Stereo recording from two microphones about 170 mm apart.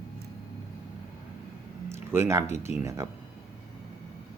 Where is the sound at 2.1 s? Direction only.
15° right (ahead or behind).